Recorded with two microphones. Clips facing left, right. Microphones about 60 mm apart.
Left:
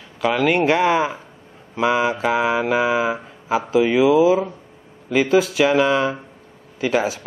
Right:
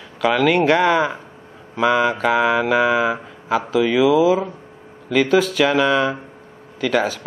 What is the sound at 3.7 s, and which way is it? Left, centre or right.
Speech, left.